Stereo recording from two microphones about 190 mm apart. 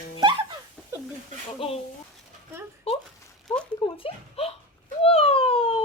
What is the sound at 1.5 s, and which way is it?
Speech, 30° left (ahead or behind).